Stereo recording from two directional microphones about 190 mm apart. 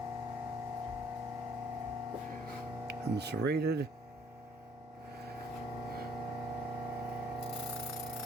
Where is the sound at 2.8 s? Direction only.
60° right (ahead or behind).